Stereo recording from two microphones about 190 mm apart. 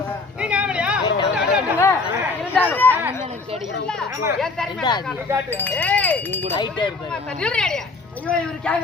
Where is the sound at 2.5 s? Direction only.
10° left (ahead or behind).